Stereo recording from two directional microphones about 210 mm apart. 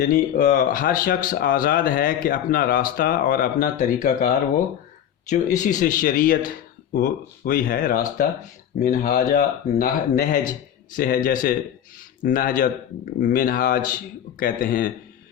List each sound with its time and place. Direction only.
0.0 s speech: 40° left (ahead or behind)
5.3 s speech: 35° left (ahead or behind)